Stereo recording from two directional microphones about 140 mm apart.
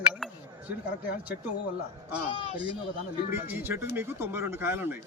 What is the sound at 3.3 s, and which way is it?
Speech, 15° right (ahead or behind).